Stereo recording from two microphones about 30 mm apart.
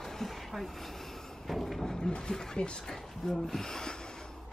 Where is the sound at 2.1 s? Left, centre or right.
Left.